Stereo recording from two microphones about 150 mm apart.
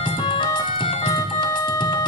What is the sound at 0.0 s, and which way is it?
Music, 35° left (ahead or behind).